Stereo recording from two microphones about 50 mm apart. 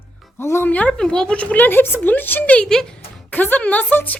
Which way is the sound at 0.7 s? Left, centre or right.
Left.